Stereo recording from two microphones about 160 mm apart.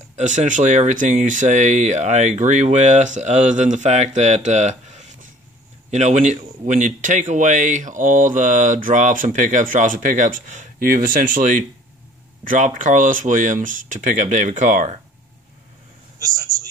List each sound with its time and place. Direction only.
0.1 s speech: 50° right (ahead or behind)
16.2 s a man's voice: 25° right (ahead or behind)